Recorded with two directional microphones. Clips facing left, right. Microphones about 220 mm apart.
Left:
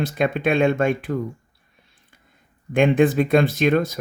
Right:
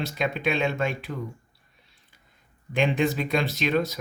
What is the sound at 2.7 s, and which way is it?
Speech, 50° left (ahead or behind).